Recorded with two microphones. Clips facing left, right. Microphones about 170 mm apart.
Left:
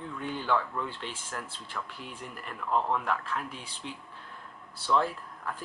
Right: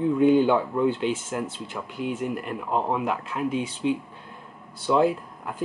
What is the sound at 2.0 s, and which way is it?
Speech, 80° right.